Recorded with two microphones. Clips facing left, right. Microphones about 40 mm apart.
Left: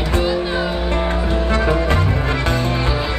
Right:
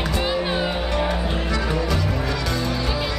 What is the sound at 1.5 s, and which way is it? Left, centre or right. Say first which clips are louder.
Music: left 7 dB; left.